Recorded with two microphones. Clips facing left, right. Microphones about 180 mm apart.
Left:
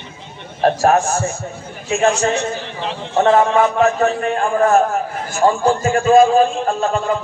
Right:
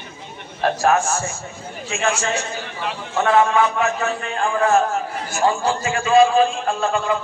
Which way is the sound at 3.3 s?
40° left (ahead or behind).